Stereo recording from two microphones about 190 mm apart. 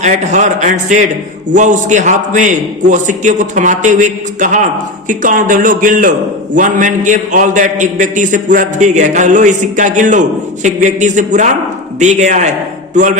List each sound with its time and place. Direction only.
0.0 s a man's voice: 40° right (ahead or behind)